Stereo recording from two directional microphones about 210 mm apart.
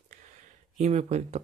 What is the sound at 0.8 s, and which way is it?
Speech, 30° right (ahead or behind).